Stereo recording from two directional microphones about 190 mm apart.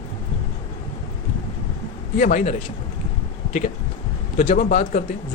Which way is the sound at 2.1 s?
40° left (ahead or behind).